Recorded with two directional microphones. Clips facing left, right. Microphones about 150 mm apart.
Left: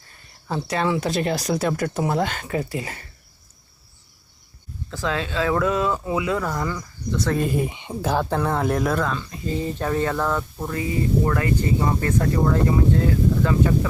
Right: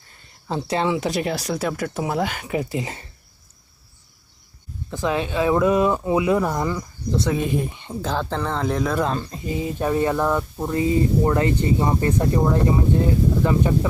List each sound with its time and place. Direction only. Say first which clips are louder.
0.1 s speech: right 1 dB; 25° right (ahead or behind)
1.2 s speech: left 2 dB; 5° right (ahead or behind); by 3.1 s 20° right (ahead or behind)
4.9 s speech: right 3 dB; 20° right (ahead or behind)
7.3 s speech: left 2 dB; centre (ahead or behind)
7.7 s speech: left 2 dB; 15° left (ahead or behind)
9.1 s speech: right 4 dB; 40° right (ahead or behind)
9.5 s speech: right 1 dB; 10° right (ahead or behind)